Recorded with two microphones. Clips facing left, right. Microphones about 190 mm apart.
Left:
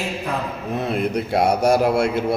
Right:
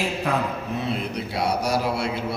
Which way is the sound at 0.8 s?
55° left (ahead or behind).